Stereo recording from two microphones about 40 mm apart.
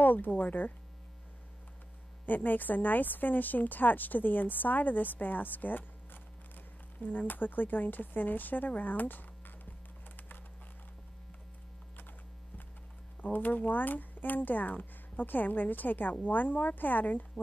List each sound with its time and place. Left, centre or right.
0.0 s speech: left
2.2 s speech: left
7.0 s speech: left
10.1 s a sound: left
13.2 s speech: left